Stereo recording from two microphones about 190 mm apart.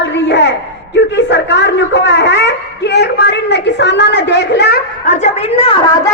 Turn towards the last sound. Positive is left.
turn(degrees=30)  # may be behind; listen again after turning